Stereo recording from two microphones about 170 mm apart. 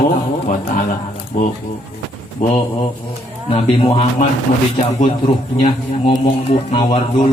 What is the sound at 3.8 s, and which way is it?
Speech, 35° left (ahead or behind).